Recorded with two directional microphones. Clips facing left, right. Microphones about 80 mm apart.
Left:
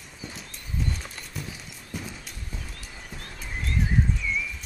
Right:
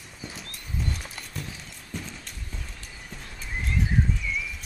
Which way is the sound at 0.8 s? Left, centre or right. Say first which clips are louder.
Left 1 dB; centre.